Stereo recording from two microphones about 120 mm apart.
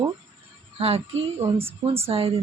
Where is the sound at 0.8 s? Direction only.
55° right (ahead or behind).